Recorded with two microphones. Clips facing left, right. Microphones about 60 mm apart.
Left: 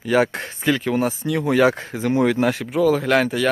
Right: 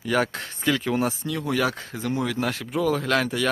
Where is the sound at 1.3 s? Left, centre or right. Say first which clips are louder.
Left 11 dB; left.